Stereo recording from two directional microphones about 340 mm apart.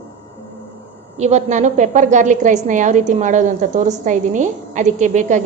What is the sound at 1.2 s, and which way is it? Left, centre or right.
A woman's voice, centre.